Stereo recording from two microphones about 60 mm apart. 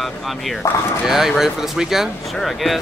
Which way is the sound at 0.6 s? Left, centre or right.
Left.